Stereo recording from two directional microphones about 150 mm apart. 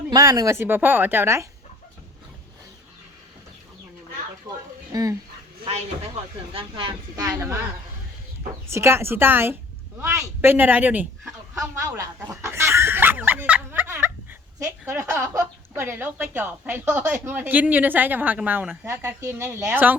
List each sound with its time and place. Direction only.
0.1 s a woman's voice: 25° right (ahead or behind)
4.9 s speech: 25° right (ahead or behind)
6.5 s speech: 35° right (ahead or behind)
7.2 s speech: 20° right (ahead or behind)
8.7 s a woman's voice: 15° right (ahead or behind)